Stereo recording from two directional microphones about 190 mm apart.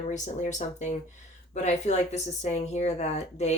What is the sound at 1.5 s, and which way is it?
Speech, 35° left (ahead or behind).